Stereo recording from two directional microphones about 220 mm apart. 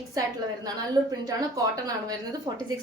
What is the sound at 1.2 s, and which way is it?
Speech, 15° right (ahead or behind).